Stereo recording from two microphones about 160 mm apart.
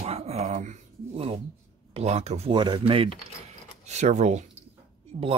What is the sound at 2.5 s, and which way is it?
Speech, 30° right (ahead or behind).